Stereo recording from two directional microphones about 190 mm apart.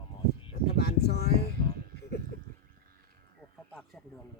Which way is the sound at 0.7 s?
55° left (ahead or behind).